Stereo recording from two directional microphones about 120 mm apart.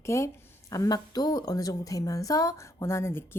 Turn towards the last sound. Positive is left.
turn(degrees=20)  # may be behind; listen again after turning